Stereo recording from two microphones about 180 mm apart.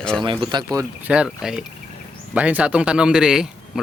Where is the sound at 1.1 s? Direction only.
5° right (ahead or behind).